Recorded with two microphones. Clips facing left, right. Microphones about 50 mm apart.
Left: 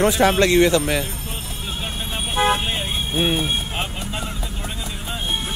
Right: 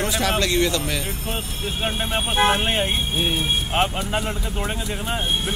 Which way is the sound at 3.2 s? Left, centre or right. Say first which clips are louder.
Left 5 dB; left.